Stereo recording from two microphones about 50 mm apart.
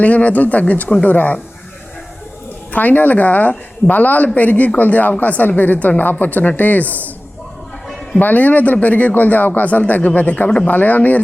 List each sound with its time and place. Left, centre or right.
0.0 s speech: left
2.7 s speech: left
8.2 s speech: left